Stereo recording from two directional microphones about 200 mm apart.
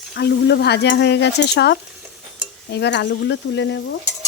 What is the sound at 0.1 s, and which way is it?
Speech, 55° left (ahead or behind).